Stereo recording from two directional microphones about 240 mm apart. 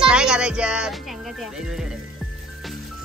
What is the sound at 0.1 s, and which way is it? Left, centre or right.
Speech, centre.